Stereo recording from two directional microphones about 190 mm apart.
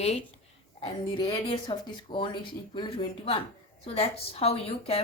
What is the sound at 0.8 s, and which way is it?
Speech, 25° left (ahead or behind).